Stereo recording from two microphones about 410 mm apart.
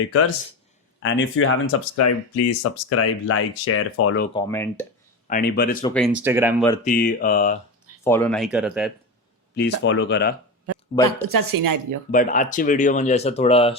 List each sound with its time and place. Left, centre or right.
0.1 s speech: left
4.4 s speech: centre
5.3 s speech: left
5.8 s speech: centre
6.8 s speech: centre
8.0 s speech: centre
9.6 s speech: left
11.3 s speech: right
12.1 s speech: centre